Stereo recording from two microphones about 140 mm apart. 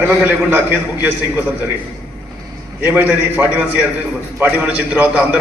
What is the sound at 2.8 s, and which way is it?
A man's voice, 10° right (ahead or behind).